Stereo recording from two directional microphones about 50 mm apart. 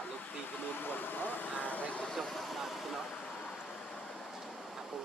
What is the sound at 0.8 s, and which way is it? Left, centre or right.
Speech, left.